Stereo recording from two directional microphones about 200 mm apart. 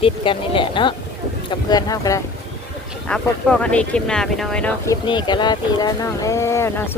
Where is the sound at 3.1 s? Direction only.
5° left (ahead or behind).